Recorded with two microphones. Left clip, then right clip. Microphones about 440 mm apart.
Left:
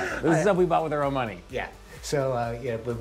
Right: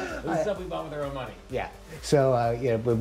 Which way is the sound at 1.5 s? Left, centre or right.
Right.